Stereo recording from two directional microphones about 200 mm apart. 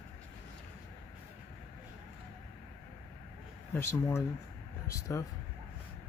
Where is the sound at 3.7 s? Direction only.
15° left (ahead or behind).